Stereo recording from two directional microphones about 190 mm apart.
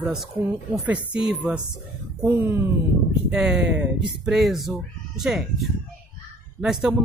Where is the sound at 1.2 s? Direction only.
5° right (ahead or behind).